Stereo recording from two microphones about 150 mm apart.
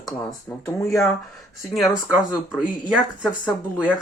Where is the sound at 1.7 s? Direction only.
Centre (ahead or behind).